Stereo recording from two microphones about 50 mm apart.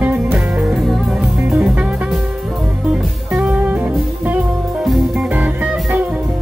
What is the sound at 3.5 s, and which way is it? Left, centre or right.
Music, right.